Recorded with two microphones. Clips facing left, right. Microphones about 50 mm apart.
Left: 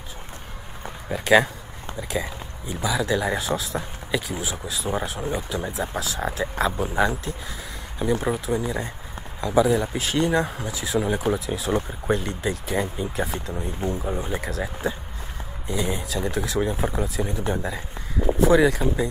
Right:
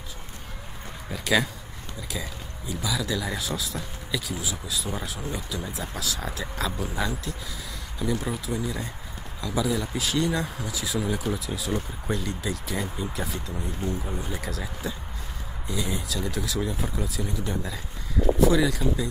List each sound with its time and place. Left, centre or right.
1.1 s speech: left
2.7 s speech: left